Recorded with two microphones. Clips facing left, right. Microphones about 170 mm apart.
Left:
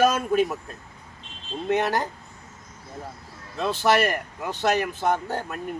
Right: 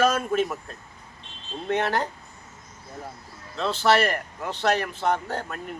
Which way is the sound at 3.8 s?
15° left (ahead or behind).